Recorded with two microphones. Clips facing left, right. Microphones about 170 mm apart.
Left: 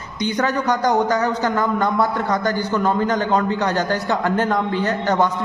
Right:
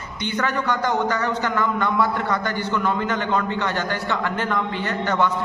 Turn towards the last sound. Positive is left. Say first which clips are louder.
# left 3 dB
turn(degrees=40)  # may be behind; listen again after turning